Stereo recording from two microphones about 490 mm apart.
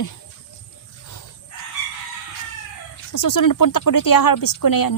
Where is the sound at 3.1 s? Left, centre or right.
Left.